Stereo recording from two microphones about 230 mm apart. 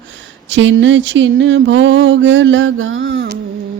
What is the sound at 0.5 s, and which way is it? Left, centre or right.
Mantra, right.